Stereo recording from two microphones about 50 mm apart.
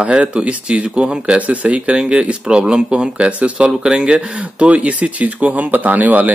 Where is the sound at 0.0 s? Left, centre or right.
Right.